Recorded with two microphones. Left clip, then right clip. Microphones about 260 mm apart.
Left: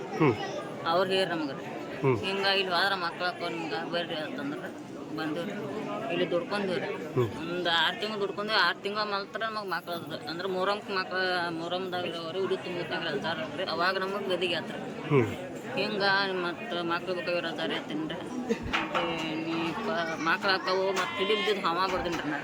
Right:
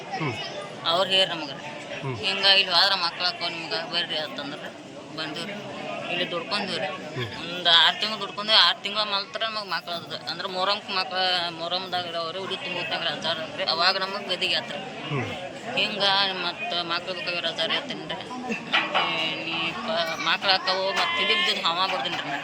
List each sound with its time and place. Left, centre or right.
0.9 s speech: centre
6.1 s speech: centre
19.9 s speech: centre